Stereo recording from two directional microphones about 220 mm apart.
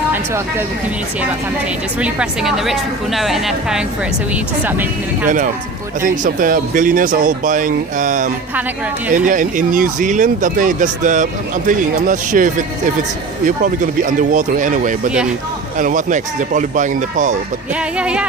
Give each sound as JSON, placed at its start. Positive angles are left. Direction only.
{"t": 2.0, "sound": "a woman's voice", "side_deg": -5}
{"t": 6.0, "sound": "speech", "side_deg": -35}
{"t": 17.7, "sound": "a woman's voice", "side_deg": -5}